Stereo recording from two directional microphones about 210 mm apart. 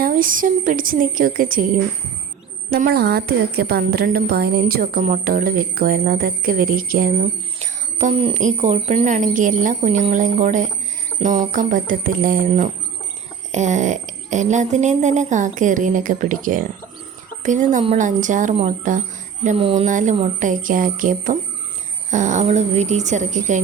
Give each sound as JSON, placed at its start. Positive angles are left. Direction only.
{"t": 0.0, "sound": "a woman's voice", "side_deg": -40}
{"t": 19.5, "sound": "speech", "side_deg": -25}